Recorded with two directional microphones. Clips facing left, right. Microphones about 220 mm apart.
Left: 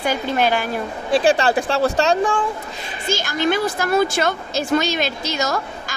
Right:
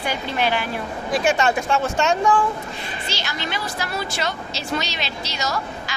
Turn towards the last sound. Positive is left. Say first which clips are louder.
# left 4 dB
turn(degrees=50)  # may be behind; listen again after turning